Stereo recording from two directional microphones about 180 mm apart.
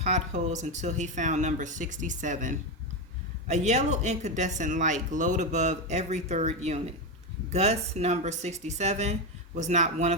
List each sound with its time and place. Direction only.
0.0 s speech: 40° right (ahead or behind)